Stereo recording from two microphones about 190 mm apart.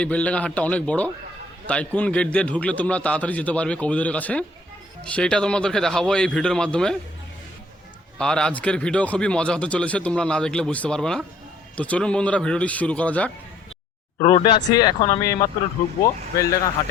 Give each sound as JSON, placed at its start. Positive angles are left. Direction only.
{"t": 0.0, "sound": "a man's voice", "side_deg": 5}
{"t": 8.2, "sound": "a man's voice", "side_deg": 5}
{"t": 14.2, "sound": "speech", "side_deg": 30}